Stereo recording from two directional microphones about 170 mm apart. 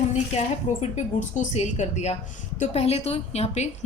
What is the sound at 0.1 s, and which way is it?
A woman's voice, 40° left (ahead or behind).